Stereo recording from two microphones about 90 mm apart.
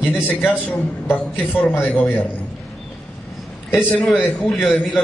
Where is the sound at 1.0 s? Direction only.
20° left (ahead or behind).